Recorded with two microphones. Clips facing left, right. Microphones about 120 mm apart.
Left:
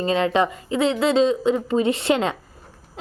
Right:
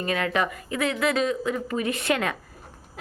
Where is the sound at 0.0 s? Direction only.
25° left (ahead or behind).